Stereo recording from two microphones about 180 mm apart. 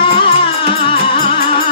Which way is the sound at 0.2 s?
30° left (ahead or behind).